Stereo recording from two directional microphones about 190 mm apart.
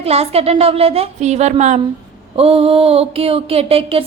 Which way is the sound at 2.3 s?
30° right (ahead or behind).